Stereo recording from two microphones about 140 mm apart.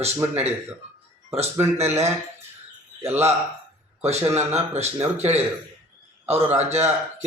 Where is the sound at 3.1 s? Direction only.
50° right (ahead or behind).